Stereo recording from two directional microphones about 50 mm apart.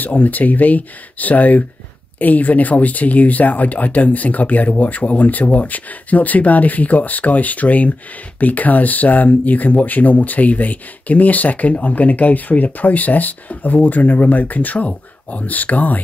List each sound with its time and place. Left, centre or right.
0.0 s speech: left